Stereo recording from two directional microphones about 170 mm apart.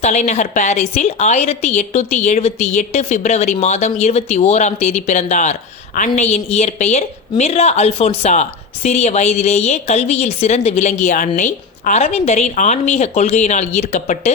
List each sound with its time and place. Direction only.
0.0 s a woman's voice: 45° left (ahead or behind)